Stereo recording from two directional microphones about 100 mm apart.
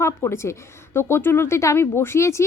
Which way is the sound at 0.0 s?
25° left (ahead or behind).